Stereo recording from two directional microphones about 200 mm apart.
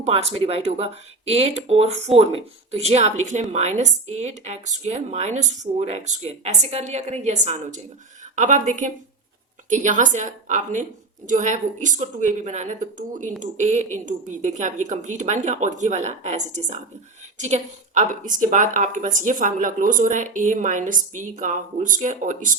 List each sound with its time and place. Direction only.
0.0 s speech: 30° right (ahead or behind)